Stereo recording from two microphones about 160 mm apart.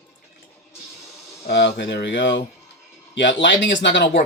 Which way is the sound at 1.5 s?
90° left.